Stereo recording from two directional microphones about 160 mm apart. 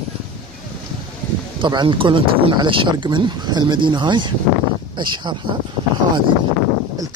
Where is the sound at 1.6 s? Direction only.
30° right (ahead or behind).